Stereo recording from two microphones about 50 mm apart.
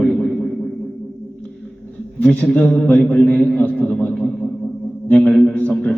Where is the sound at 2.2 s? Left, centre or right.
Left.